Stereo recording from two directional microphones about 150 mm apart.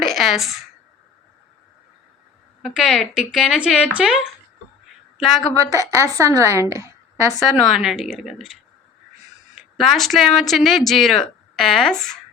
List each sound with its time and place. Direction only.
0.1 s speech: centre (ahead or behind)
2.6 s a woman's voice: centre (ahead or behind)
6.0 s a woman's voice: 20° right (ahead or behind)
7.3 s a woman's voice: centre (ahead or behind)
9.6 s a woman's voice: centre (ahead or behind)